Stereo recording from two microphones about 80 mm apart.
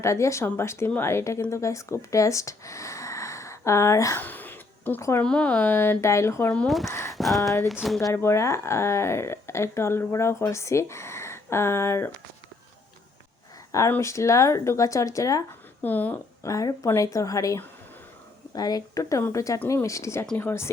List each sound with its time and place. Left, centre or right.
0.0 s speech: left
4.2 s a sound: left
4.9 s speech: left
5.2 s speech: centre; by 7.2 s left
7.2 s speech: centre
8.1 s speech: left
14.0 s speech: left
15.8 s speech: left
16.4 s speech: left
18.5 s speech: left